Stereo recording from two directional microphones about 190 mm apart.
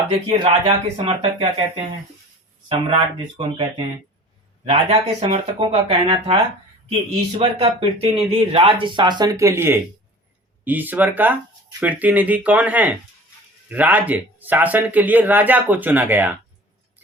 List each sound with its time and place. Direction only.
0.3 s speech: 25° right (ahead or behind)
7.6 s speech: 30° right (ahead or behind); by 16.3 s 10° right (ahead or behind)